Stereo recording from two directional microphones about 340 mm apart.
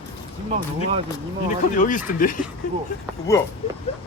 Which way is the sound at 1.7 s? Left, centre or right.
Left.